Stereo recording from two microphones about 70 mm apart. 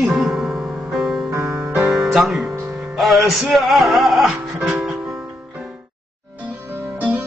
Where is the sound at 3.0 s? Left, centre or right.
Centre.